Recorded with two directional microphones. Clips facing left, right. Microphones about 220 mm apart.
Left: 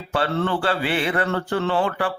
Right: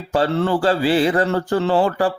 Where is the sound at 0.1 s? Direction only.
35° right (ahead or behind).